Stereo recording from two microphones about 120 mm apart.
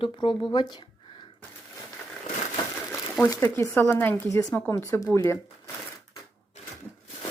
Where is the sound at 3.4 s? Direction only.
20° left (ahead or behind).